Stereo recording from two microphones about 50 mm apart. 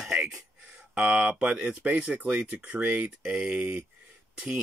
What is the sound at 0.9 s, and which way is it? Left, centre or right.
Speech, right.